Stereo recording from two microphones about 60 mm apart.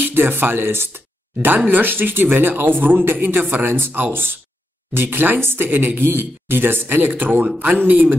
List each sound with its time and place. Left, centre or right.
0.0 s speech: right